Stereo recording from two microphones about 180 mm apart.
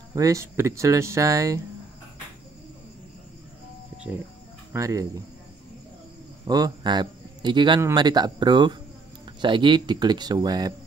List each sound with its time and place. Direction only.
0.1 s speech: 20° right (ahead or behind)
4.7 s speech: 20° right (ahead or behind)
6.4 s speech: 20° right (ahead or behind)